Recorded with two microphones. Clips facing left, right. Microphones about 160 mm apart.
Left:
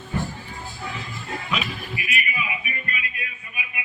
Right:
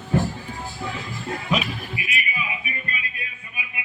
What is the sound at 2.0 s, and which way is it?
Music, 20° right (ahead or behind).